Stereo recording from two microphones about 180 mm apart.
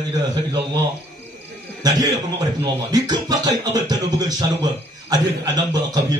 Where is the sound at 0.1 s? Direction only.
20° right (ahead or behind).